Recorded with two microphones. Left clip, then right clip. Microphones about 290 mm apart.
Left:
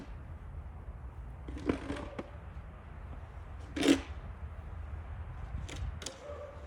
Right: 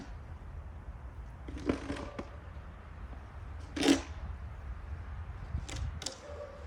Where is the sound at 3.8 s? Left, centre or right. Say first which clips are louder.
Even; centre.